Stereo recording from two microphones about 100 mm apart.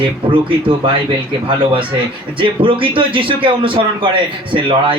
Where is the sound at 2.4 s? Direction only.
60° right (ahead or behind).